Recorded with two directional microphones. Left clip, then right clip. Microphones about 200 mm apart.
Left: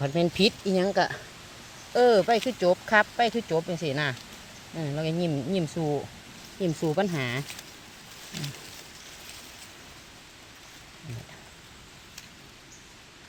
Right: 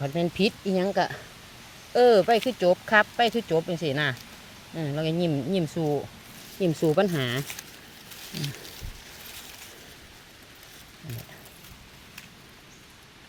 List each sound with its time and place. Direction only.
0.0 s speech: 10° left (ahead or behind)
1.9 s speech: 15° right (ahead or behind)